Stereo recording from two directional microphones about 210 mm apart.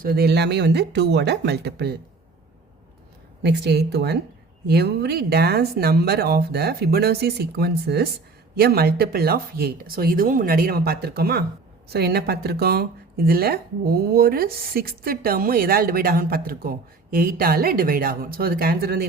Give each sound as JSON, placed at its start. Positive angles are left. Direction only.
{"t": 0.0, "sound": "speech", "side_deg": -45}
{"t": 3.4, "sound": "speech", "side_deg": -55}